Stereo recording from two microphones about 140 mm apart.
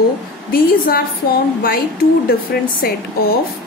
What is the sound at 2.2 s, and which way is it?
A woman's voice, 90° left.